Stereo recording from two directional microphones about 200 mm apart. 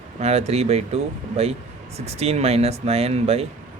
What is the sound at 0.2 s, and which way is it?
Speech, 30° right (ahead or behind).